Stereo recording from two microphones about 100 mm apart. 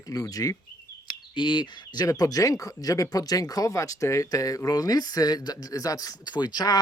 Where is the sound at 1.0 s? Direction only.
50° left (ahead or behind).